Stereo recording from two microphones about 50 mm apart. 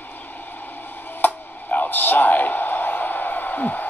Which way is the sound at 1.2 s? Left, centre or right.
Left.